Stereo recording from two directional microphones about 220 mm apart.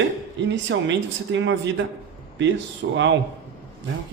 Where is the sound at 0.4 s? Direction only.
55° right (ahead or behind).